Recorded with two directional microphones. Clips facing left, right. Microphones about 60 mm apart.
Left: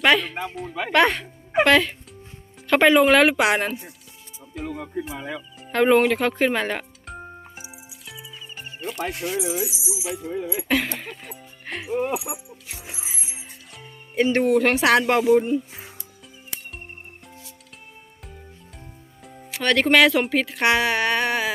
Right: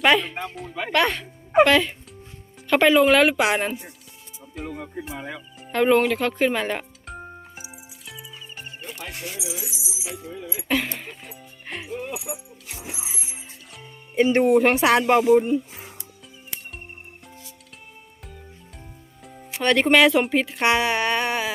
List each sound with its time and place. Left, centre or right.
0.0 s speech: centre
4.5 s music: centre
5.0 s speech: centre
8.0 s music: centre
9.4 s jingle bell: left
10.2 s music: left
10.7 s speech: centre
11.9 s speech: left
13.2 s music: centre
14.3 s speech: centre
19.2 s music: centre
19.6 s speech: centre